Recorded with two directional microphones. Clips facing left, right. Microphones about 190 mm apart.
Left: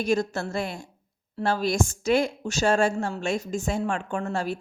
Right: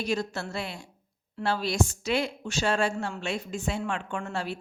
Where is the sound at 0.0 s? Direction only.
50° left (ahead or behind).